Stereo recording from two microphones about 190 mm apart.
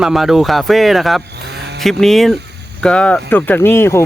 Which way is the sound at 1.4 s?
60° right (ahead or behind).